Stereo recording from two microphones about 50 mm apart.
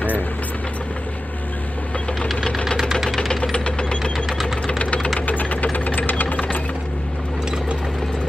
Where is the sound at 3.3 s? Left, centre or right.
Centre.